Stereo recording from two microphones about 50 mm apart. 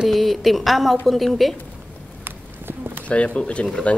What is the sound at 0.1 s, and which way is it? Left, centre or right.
A woman's voice, centre.